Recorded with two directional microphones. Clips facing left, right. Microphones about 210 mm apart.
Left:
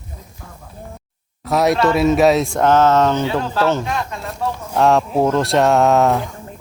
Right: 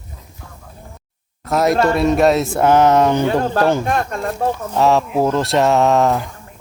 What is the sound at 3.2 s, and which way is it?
Speech, 50° right (ahead or behind).